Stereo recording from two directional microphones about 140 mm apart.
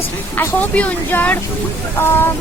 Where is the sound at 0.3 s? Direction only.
10° left (ahead or behind).